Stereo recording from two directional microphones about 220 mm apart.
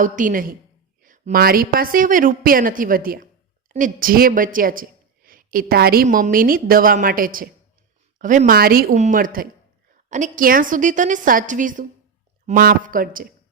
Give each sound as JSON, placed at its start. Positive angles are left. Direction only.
{"t": 0.0, "sound": "a woman's voice", "side_deg": -35}